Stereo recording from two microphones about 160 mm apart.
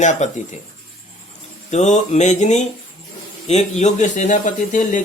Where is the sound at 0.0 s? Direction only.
50° left (ahead or behind).